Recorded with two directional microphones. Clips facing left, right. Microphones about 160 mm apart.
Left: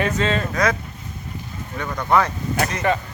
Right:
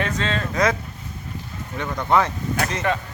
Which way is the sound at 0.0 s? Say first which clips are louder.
Left 4 dB; 5° left (ahead or behind).